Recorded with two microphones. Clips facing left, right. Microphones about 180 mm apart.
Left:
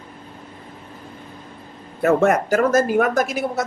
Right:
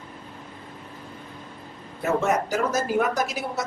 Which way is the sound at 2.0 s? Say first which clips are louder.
Left 7 dB; 60° left (ahead or behind).